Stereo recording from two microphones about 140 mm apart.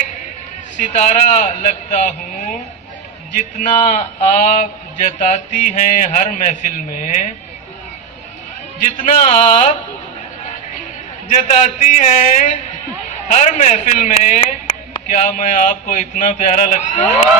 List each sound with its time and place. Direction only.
0.8 s a man's voice: 60° left (ahead or behind)
8.8 s a man's voice: 65° left (ahead or behind)
11.3 s a man's voice: 60° left (ahead or behind)